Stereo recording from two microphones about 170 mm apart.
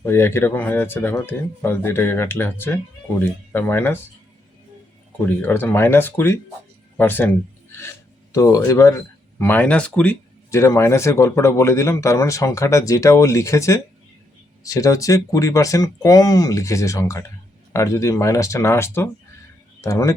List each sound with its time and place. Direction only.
0.0 s speech: 15° left (ahead or behind)
5.2 s speech: 15° left (ahead or behind)
8.3 s speech: 20° left (ahead or behind)